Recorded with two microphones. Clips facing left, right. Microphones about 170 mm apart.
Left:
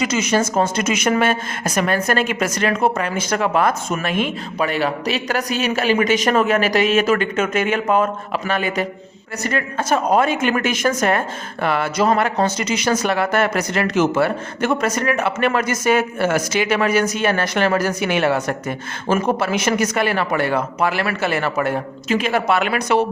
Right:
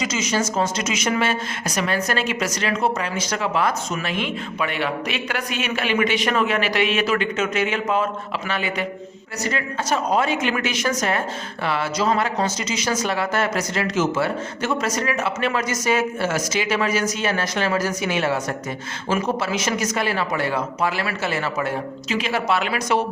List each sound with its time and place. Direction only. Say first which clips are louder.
0.0 s a woman's voice: left 5 dB; 60° left (ahead or behind)